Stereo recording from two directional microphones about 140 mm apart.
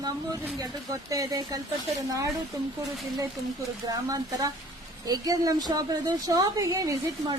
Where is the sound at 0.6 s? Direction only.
25° right (ahead or behind).